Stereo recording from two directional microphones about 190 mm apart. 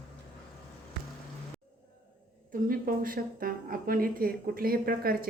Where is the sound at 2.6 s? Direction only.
45° right (ahead or behind).